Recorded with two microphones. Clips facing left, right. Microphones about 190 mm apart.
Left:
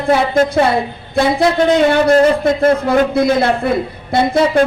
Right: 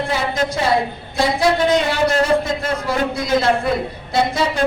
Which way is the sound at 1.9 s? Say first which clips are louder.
Left 6 dB; 55° left (ahead or behind).